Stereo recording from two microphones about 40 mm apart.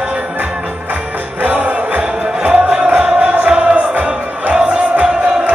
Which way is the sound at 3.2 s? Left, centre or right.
Right.